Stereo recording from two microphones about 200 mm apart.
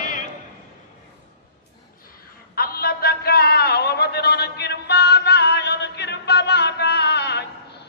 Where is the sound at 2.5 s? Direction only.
50° left (ahead or behind).